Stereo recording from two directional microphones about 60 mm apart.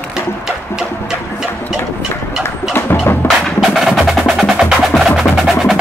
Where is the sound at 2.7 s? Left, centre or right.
Left.